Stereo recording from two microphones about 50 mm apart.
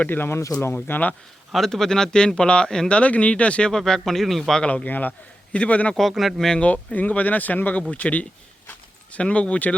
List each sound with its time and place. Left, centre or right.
0.0 s speech: left
0.3 s speech: left
0.7 s speech: left
1.5 s speech: centre
3.0 s speech: left
3.7 s speech: centre
4.6 s speech: left
5.9 s speech: centre
6.6 s speech: left